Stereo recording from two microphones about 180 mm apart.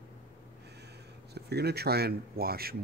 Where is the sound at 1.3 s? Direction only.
65° right (ahead or behind).